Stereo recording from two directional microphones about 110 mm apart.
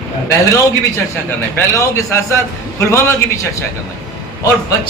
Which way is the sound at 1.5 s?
25° left (ahead or behind).